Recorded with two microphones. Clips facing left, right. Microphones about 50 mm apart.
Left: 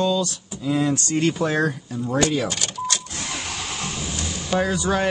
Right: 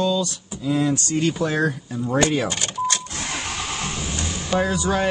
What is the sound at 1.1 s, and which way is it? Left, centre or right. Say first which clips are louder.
Speech: left 1 dB; left.